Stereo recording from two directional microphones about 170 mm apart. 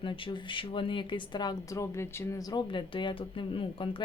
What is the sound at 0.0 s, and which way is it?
Speech, 30° left (ahead or behind).